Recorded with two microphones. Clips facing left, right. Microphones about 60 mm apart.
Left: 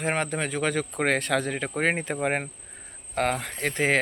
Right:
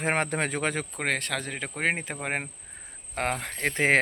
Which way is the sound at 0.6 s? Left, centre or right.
Centre.